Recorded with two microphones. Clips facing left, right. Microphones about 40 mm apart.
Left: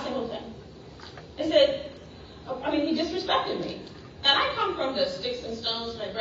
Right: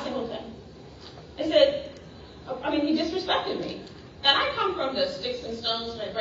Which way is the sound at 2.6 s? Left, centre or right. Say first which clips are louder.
Right 1 dB; centre.